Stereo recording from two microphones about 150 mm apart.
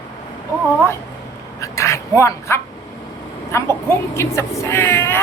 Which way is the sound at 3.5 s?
15° left (ahead or behind).